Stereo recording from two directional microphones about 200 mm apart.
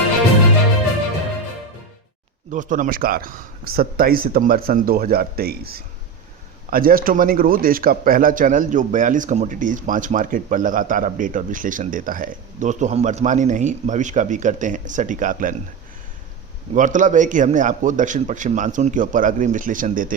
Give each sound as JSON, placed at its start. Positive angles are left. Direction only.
{"t": 2.5, "sound": "a man's voice", "side_deg": -40}
{"t": 16.7, "sound": "a man's voice", "side_deg": -40}